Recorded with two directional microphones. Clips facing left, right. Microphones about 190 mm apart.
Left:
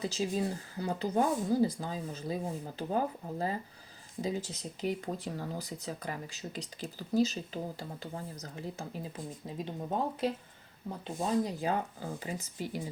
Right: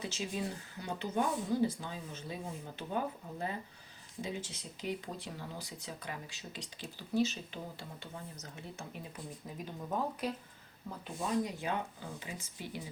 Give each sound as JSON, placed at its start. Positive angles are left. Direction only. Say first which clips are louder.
{"t": 0.0, "sound": "speech", "louder": "left 6 dB", "side_deg": 35}